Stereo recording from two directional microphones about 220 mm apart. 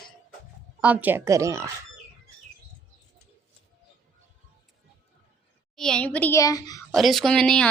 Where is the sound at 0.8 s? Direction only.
5° right (ahead or behind).